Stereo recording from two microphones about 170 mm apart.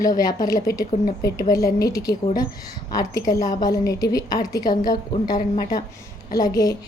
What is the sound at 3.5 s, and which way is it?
A woman's voice, 20° left (ahead or behind).